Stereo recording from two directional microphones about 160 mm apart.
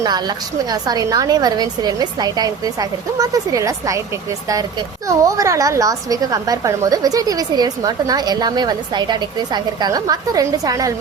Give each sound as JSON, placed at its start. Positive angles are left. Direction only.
{"t": 0.0, "sound": "a woman's voice", "side_deg": -25}
{"t": 5.0, "sound": "a woman's voice", "side_deg": -20}